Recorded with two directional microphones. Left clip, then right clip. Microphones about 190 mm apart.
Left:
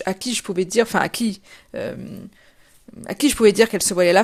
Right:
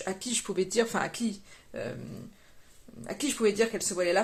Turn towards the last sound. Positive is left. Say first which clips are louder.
# left 12 dB
turn(degrees=60)  # may be behind; listen again after turning